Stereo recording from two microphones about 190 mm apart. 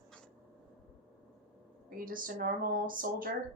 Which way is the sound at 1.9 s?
45° right (ahead or behind).